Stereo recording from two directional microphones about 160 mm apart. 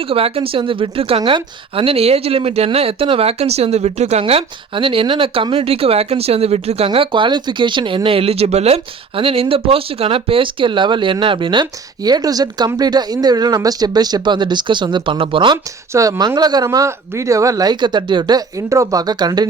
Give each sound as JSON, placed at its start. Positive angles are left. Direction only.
{"t": 0.1, "sound": "a woman's voice", "side_deg": -35}
{"t": 15.9, "sound": "speech", "side_deg": -20}